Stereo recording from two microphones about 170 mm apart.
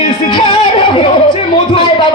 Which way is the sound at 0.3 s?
30° left (ahead or behind).